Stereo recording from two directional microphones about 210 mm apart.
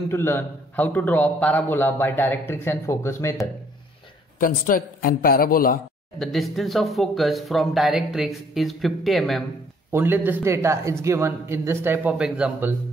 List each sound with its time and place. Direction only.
0.1 s a man's voice: 10° left (ahead or behind)
4.4 s a man's voice: 40° left (ahead or behind)
6.1 s speech: centre (ahead or behind)
9.8 s speech: 10° right (ahead or behind)